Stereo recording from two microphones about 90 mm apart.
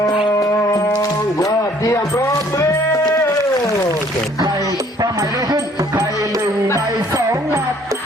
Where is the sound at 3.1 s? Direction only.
30° left (ahead or behind).